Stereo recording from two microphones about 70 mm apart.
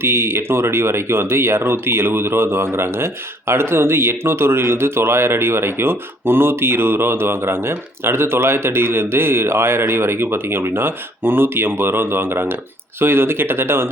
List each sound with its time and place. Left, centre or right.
0.0 s speech: right